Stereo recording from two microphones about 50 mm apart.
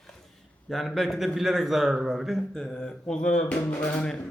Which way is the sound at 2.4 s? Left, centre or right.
Centre.